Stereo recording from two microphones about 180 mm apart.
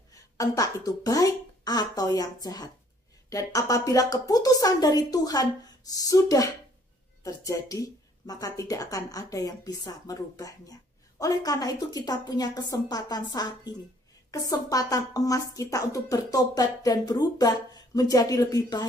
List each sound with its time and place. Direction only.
0.1 s speech: 20° left (ahead or behind)